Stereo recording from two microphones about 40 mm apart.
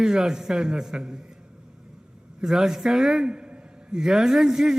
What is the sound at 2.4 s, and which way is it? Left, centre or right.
A man's voice, centre.